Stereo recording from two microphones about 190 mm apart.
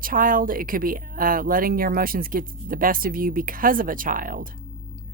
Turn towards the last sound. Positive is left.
turn(degrees=-45)  # may be behind; listen again after turning